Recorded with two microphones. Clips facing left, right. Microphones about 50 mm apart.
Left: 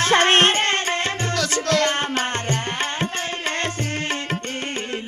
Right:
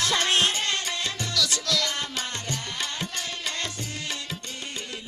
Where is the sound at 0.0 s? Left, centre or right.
Left.